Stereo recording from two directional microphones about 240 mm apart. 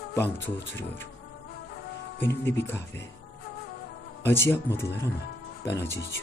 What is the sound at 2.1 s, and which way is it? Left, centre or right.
Speech, centre.